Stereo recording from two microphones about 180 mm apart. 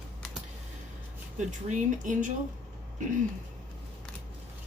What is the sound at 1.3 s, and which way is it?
Speech, 45° right (ahead or behind).